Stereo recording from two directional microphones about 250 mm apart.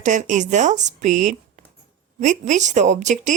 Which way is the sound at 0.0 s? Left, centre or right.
Right.